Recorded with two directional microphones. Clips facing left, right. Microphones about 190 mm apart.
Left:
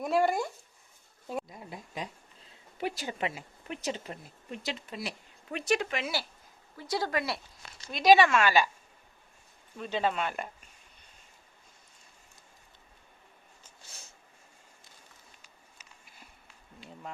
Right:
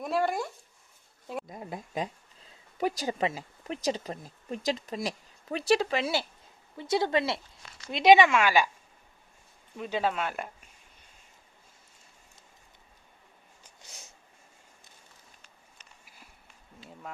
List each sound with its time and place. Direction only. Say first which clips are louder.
0.0 s dog: left 2 dB; centre (ahead or behind)
1.5 s a sound: right 5 dB; 45° right (ahead or behind)
2.7 s a woman's voice: right 5 dB; 40° right (ahead or behind); by 8.7 s 10° right (ahead or behind)
9.7 s speech: right 1 dB; 10° right (ahead or behind)